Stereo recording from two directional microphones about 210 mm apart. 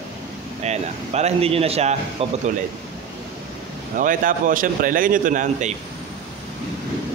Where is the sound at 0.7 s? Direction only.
30° right (ahead or behind).